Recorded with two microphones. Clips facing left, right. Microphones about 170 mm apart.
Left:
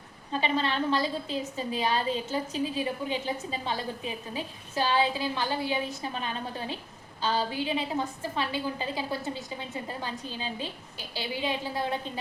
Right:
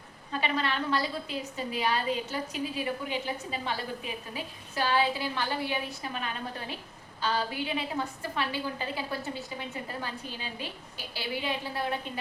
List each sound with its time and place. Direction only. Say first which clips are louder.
0.3 s a woman's voice: left 2 dB; 30° left (ahead or behind)